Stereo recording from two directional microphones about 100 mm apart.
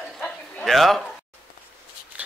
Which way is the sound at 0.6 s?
Centre (ahead or behind).